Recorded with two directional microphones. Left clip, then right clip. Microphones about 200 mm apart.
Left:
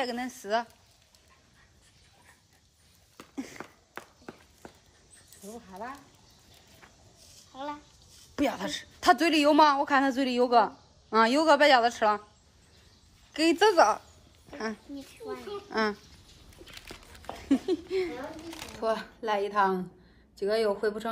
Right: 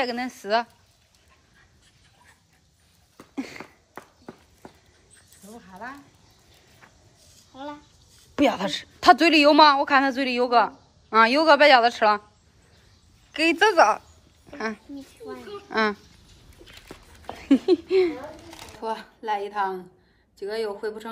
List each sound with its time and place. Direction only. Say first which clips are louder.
0.0 s a woman's voice: right 5 dB; 15° left (ahead or behind)
3.5 s walk: right 2 dB; centre (ahead or behind)
5.5 s speech: right 2 dB; 30° left (ahead or behind)
7.5 s a woman's voice: even; centre (ahead or behind)
13.3 s a woman's voice: right 3 dB; 15° left (ahead or behind)
15.0 s a child's voice: right 1 dB; centre (ahead or behind)
15.7 s a woman's voice: right 6 dB; 10° left (ahead or behind)
17.3 s speech: right 8 dB; 5° left (ahead or behind)